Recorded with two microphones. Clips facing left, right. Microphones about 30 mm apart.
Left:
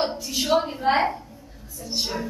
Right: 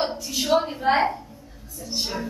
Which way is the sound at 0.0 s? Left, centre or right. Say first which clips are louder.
Left 1 dB; centre.